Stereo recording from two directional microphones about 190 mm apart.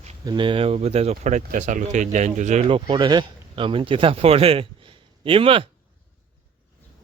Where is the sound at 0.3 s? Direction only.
25° right (ahead or behind).